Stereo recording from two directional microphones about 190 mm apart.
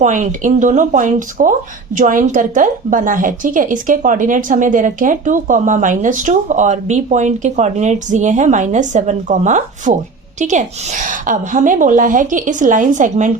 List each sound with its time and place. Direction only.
0.0 s a woman's voice: 40° right (ahead or behind)